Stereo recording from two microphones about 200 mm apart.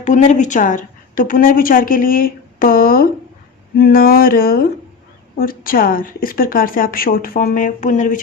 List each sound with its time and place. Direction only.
0.0 s a woman's voice: 35° left (ahead or behind)